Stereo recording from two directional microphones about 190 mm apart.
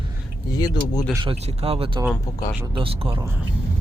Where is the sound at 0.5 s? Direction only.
20° left (ahead or behind).